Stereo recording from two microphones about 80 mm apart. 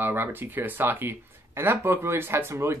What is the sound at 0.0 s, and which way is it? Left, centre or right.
Speech, right.